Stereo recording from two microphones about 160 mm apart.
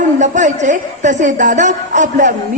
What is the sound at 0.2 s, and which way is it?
A woman's voice, 50° right (ahead or behind).